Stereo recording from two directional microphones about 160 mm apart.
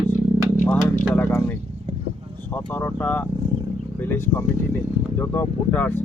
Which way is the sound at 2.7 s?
10° left (ahead or behind).